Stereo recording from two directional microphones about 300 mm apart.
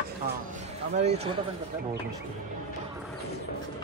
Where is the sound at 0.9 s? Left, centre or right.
Right.